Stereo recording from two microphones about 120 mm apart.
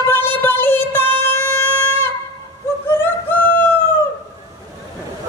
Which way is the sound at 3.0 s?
15° left (ahead or behind).